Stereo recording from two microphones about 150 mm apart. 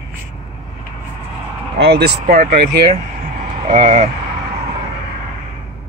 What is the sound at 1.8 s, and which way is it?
Speech, 90° right.